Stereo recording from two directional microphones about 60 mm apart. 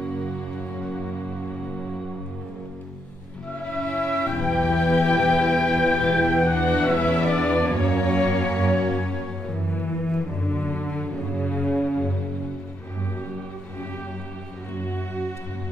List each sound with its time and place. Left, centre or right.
3.6 s music: centre
10.0 s cello: left